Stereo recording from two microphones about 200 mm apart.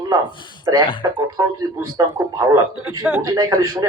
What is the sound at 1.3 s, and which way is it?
Speech, 20° right (ahead or behind).